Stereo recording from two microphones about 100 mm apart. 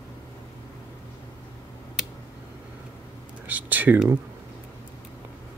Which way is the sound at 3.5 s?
15° right (ahead or behind).